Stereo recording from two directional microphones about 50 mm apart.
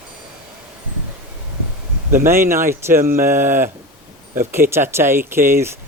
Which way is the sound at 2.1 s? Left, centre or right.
Right.